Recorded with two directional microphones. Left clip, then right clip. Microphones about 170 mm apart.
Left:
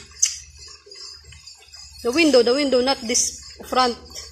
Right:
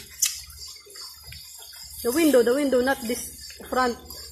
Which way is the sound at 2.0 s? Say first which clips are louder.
Left 3 dB; 15° left (ahead or behind).